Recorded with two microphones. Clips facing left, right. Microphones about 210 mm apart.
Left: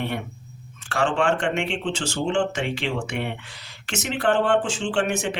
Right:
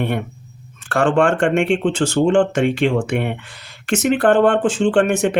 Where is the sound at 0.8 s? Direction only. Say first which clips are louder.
Right 7 dB; 55° right (ahead or behind).